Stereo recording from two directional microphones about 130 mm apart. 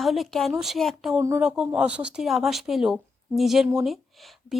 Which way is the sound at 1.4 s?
5° right (ahead or behind).